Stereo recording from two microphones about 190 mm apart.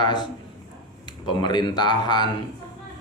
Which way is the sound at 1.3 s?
25° left (ahead or behind).